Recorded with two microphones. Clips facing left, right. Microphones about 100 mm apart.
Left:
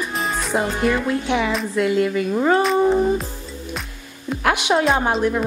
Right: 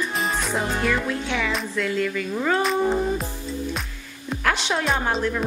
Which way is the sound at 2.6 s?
Centre (ahead or behind).